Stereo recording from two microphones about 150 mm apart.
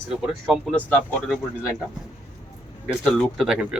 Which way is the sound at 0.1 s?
Centre (ahead or behind).